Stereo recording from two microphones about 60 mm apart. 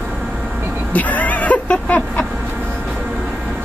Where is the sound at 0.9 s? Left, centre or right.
Left.